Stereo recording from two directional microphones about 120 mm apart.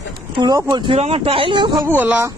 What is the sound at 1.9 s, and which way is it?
Speech, 15° right (ahead or behind).